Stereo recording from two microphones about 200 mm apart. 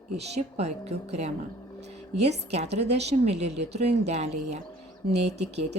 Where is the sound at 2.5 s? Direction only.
35° right (ahead or behind).